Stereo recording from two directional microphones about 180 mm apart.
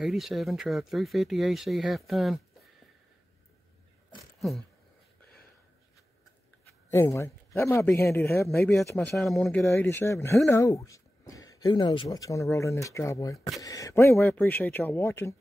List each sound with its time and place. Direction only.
0.0 s speech: centre (ahead or behind)
6.9 s speech: 15° left (ahead or behind)
9.7 s speech: 15° left (ahead or behind)